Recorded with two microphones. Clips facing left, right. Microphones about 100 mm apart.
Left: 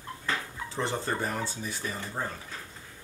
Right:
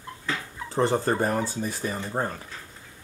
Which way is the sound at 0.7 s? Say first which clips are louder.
Right 8 dB; 45° right (ahead or behind).